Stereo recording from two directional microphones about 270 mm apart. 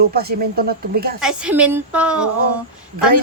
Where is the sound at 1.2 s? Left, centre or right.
Centre.